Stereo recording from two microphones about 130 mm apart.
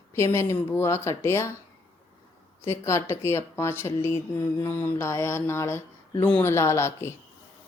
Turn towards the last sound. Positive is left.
turn(degrees=20)  # may be behind; listen again after turning